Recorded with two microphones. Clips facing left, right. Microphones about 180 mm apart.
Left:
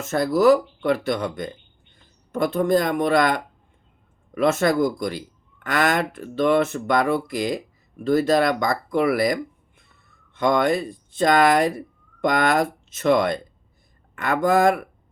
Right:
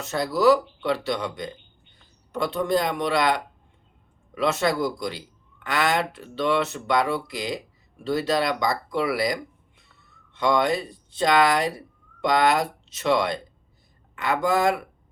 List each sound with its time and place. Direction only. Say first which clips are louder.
0.0 s speech: left 3 dB; 50° left (ahead or behind)